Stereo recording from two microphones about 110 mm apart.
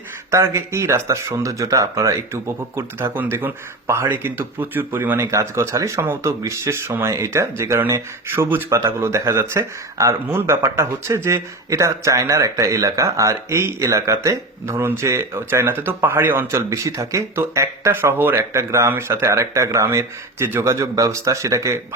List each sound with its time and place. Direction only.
0.3 s speech: 25° right (ahead or behind)